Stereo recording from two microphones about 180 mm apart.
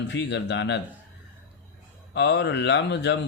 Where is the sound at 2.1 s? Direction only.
75° left (ahead or behind).